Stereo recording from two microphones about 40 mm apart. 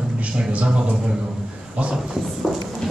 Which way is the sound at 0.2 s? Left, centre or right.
Right.